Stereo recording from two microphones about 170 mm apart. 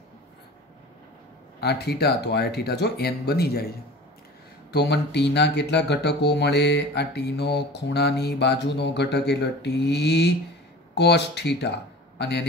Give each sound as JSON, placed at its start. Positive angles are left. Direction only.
{"t": 1.6, "sound": "speech", "side_deg": 75}
{"t": 4.7, "sound": "mantra", "side_deg": 80}
{"t": 11.0, "sound": "speech", "side_deg": 80}